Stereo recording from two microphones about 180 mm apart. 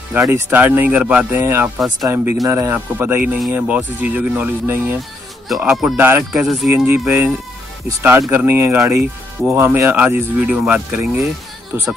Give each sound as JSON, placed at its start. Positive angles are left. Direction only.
{"t": 0.1, "sound": "speech", "side_deg": -10}
{"t": 6.4, "sound": "speech", "side_deg": 0}
{"t": 6.7, "sound": "speech", "side_deg": -10}